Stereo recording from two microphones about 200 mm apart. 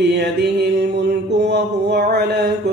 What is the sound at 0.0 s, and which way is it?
Mantra, 60° right (ahead or behind).